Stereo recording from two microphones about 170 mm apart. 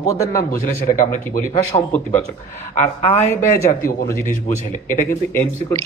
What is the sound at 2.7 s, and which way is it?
Speech, 40° left (ahead or behind).